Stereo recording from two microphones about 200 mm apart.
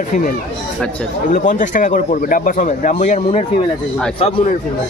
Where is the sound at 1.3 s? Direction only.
40° left (ahead or behind).